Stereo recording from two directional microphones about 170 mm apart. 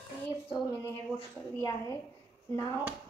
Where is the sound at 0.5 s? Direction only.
10° left (ahead or behind).